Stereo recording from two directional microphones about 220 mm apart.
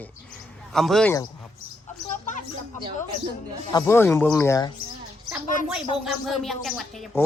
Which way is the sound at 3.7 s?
15° left (ahead or behind).